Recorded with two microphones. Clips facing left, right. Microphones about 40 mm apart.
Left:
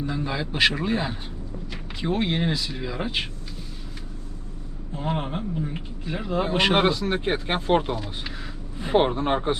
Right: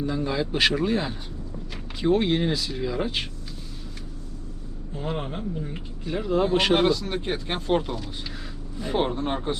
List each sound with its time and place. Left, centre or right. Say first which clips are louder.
0.0 s speech: right 2 dB; centre
4.9 s speech: left 2 dB; centre